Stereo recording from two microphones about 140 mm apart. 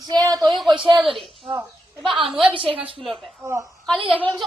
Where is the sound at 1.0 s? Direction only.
Centre (ahead or behind).